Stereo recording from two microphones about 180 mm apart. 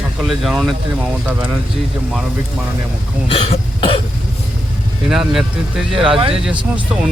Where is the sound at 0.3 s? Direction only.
Centre (ahead or behind).